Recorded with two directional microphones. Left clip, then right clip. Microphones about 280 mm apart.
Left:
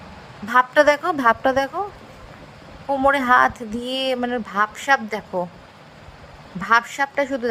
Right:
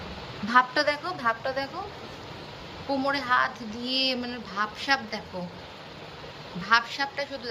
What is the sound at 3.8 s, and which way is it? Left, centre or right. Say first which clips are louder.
Speech: left 2 dB; left.